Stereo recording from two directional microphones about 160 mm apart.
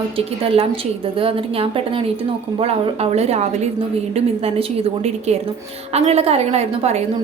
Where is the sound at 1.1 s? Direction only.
35° right (ahead or behind).